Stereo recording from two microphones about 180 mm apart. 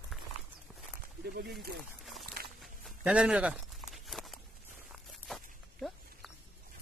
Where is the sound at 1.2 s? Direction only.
65° right (ahead or behind).